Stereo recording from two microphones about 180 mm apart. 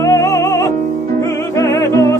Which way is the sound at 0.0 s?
20° left (ahead or behind).